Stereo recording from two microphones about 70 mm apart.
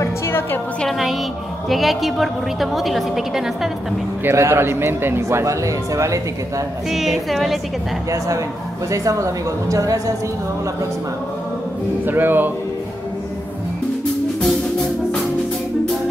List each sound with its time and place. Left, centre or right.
0.0 s music: left
0.8 s a woman's voice: centre
4.2 s a man's voice: right
5.4 s a woman's voice: right
6.9 s a woman's voice: centre
8.9 s a woman's voice: right
12.1 s speech: right